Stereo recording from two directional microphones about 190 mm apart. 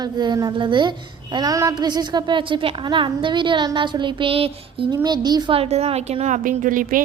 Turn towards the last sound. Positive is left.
turn(degrees=-45)  # may be behind; listen again after turning